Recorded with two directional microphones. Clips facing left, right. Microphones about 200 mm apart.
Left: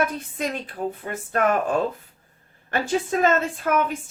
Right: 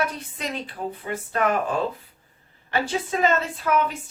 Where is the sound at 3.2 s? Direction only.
50° left (ahead or behind).